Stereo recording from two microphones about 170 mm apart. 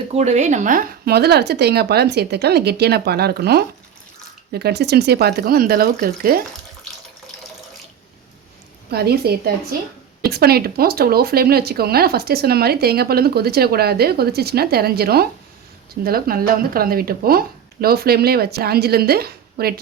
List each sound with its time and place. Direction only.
0.1 s speech: 40° right (ahead or behind); by 6.4 s 60° right (ahead or behind)
8.9 s speech: 70° right (ahead or behind)